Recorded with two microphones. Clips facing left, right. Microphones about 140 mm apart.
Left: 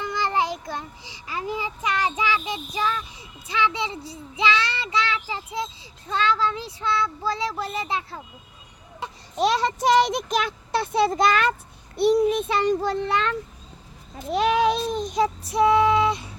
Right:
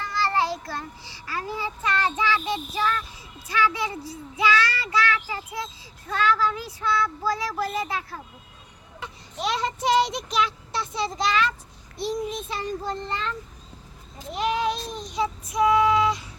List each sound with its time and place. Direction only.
0.0 s child singing: 15° left (ahead or behind)
9.0 s speech: 35° left (ahead or behind)
11.9 s a child's voice: 65° left (ahead or behind)
14.3 s a child's voice: 85° left
15.1 s child singing: 45° left (ahead or behind)
15.5 s female singing: 30° left (ahead or behind)